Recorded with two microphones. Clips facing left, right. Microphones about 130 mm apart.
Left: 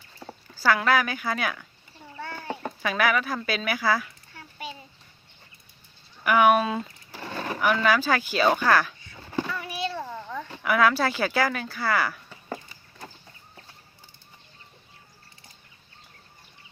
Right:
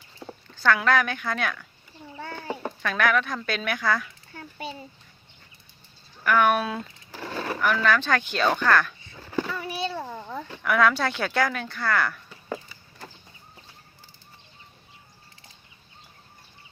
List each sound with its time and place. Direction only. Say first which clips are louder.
0.2 s speech: even; 5° left (ahead or behind)
2.8 s speech: even; 5° left (ahead or behind)
6.2 s speech: left 2 dB; 10° left (ahead or behind)
7.1 s a sound: right 1 dB; 10° right (ahead or behind)
7.3 s speech: left 1 dB; 10° left (ahead or behind)
9.5 s a sound: right 1 dB; 30° right (ahead or behind)
10.6 s speech: even; centre (ahead or behind)